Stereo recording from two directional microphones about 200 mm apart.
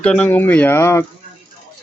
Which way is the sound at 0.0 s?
5° left (ahead or behind).